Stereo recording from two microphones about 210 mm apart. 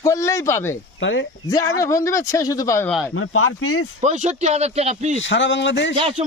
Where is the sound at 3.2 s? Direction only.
90° left.